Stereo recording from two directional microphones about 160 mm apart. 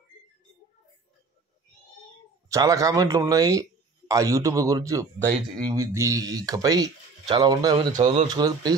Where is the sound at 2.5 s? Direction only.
20° right (ahead or behind).